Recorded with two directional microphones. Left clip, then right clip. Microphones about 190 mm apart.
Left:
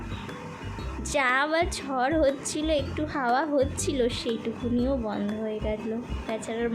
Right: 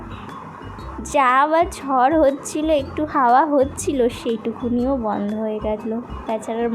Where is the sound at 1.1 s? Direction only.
10° right (ahead or behind).